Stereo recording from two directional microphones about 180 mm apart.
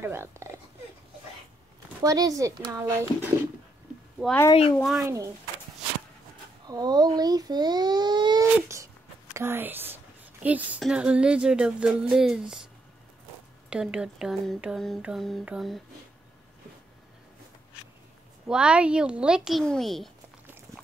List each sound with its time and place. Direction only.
0.0 s speech: 15° right (ahead or behind)
2.0 s speech: 20° right (ahead or behind)
4.5 s speech: 30° left (ahead or behind)
4.7 s speech: centre (ahead or behind)
5.0 s speech: 15° right (ahead or behind)
6.7 s a child's voice: 20° right (ahead or behind); by 12.5 s 5° right (ahead or behind)
13.7 s speech: 5° right (ahead or behind)
18.5 s speech: 5° right (ahead or behind)